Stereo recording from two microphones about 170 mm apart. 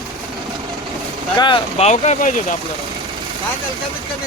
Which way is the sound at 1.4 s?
30° left (ahead or behind).